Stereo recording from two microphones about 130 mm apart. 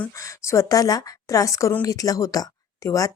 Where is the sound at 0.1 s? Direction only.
25° left (ahead or behind).